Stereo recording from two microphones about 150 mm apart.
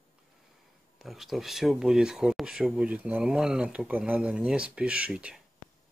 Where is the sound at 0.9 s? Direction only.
Centre (ahead or behind).